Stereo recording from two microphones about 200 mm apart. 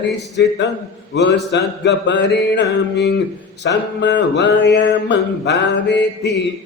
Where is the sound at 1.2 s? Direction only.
60° left (ahead or behind).